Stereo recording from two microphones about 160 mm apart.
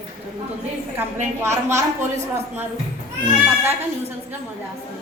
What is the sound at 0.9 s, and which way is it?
A woman's voice, 15° right (ahead or behind).